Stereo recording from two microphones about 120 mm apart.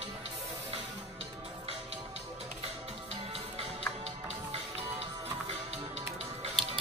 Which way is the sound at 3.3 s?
55° right (ahead or behind).